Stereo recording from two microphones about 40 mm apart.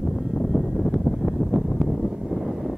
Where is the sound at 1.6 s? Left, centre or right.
Centre.